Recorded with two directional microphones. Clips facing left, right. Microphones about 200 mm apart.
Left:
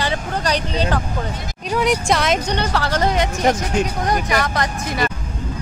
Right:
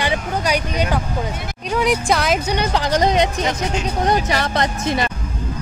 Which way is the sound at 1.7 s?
Centre (ahead or behind).